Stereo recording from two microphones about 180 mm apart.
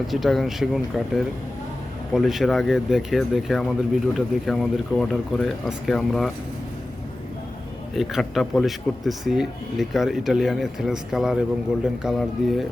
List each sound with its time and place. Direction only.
0.1 s speech: centre (ahead or behind)
7.9 s speech: centre (ahead or behind)